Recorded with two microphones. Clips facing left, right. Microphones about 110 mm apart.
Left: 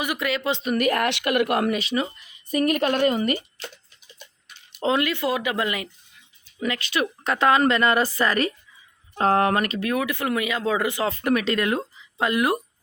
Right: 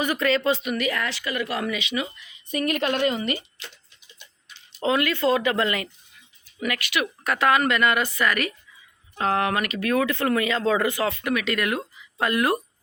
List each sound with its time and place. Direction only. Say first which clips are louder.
0.0 s speech: right 3 dB; 10° left (ahead or behind)
0.6 s speech: left 5 dB; 45° left (ahead or behind)
1.8 s speech: left 3 dB; 35° left (ahead or behind)
4.8 s speech: even; 25° left (ahead or behind)
6.6 s speech: left 1 dB; 25° left (ahead or behind)
9.9 s speech: right 5 dB; 15° left (ahead or behind)
11.1 s speech: left 3 dB; 40° left (ahead or behind); by 12.6 s 15° left (ahead or behind)